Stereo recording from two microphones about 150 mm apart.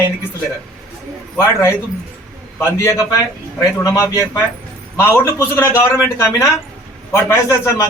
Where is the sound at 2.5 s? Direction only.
15° left (ahead or behind).